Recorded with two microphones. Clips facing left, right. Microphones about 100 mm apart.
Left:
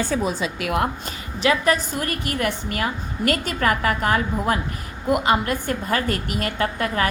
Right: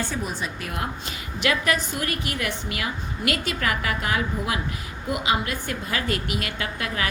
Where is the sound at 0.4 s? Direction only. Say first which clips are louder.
Left 8 dB; 70° left (ahead or behind).